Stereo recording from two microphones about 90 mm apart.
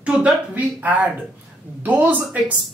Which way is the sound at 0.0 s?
15° right (ahead or behind).